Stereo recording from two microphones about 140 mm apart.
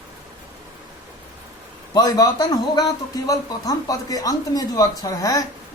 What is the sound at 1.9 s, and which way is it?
Speech, 25° left (ahead or behind).